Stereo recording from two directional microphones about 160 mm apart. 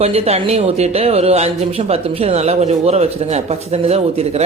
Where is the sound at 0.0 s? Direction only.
40° right (ahead or behind).